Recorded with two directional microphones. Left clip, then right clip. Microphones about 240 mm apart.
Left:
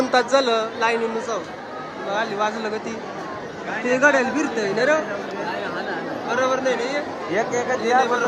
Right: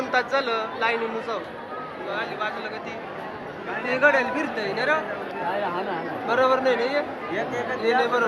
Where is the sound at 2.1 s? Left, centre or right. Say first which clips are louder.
Left 6 dB; left.